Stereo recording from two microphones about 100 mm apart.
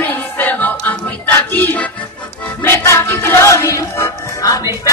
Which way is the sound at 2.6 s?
30° left (ahead or behind).